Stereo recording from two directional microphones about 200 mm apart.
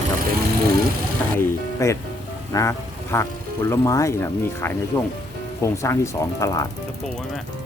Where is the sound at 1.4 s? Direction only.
15° left (ahead or behind).